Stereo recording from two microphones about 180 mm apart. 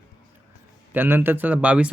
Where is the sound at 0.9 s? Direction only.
10° right (ahead or behind).